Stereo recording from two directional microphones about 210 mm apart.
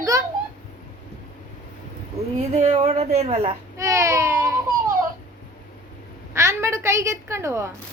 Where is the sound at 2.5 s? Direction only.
30° right (ahead or behind).